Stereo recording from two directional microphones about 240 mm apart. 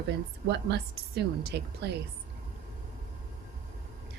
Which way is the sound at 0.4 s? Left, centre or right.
Right.